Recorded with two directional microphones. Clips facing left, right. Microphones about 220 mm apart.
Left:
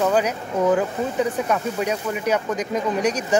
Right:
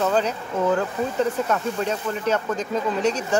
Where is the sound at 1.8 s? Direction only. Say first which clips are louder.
Left 1 dB; 15° left (ahead or behind).